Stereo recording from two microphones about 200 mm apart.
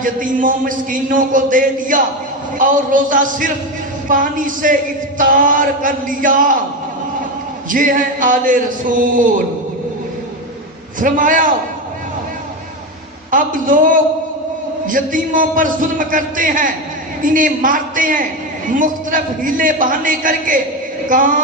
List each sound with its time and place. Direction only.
0.0 s speech: 40° right (ahead or behind)
7.7 s speech: 40° right (ahead or behind)
11.0 s speech: 40° right (ahead or behind)
13.3 s speech: 40° right (ahead or behind)